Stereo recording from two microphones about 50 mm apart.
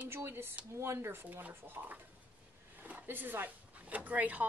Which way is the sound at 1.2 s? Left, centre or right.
Right.